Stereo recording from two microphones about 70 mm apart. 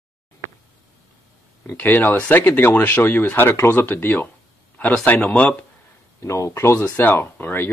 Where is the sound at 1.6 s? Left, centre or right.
Left.